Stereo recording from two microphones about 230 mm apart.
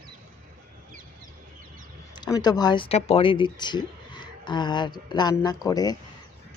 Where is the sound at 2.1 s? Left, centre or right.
Centre.